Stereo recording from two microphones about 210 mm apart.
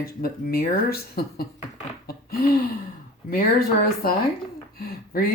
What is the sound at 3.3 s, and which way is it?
Speech, 45° left (ahead or behind).